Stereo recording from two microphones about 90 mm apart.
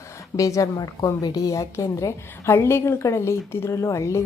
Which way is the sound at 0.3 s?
35° left (ahead or behind).